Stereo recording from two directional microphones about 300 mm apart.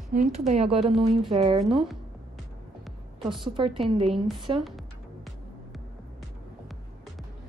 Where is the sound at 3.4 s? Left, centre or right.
Centre.